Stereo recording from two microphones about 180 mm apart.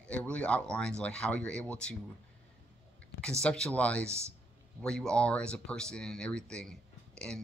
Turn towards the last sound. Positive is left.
turn(degrees=5)  # may be behind; listen again after turning